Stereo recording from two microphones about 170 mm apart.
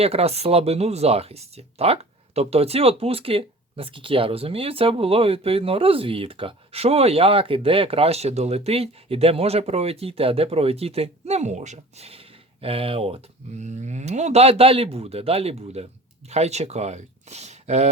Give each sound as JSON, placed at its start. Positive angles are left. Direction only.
{"t": 0.0, "sound": "speech", "side_deg": -35}